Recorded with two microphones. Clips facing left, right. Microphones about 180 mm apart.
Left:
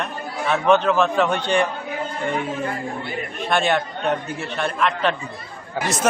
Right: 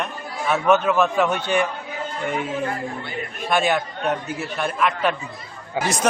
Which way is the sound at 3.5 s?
5° right (ahead or behind).